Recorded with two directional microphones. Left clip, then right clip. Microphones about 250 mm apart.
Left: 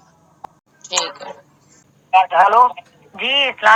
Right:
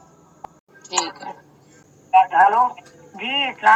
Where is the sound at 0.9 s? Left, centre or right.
Left.